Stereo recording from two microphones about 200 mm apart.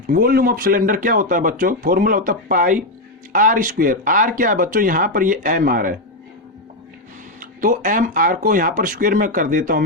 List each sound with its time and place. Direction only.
0.1 s speech: 45° right (ahead or behind)
7.3 s speech: 45° right (ahead or behind)